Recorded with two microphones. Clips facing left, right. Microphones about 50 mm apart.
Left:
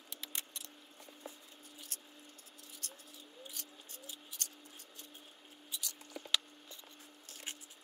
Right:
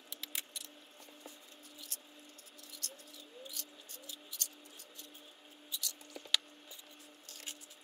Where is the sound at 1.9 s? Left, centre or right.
Left.